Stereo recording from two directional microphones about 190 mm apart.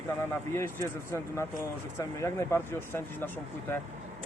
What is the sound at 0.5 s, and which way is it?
Speech, 15° left (ahead or behind).